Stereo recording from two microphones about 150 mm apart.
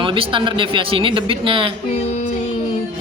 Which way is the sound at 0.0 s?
35° right (ahead or behind).